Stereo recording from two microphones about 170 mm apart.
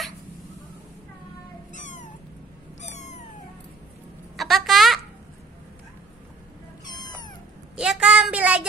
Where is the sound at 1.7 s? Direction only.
45° left (ahead or behind).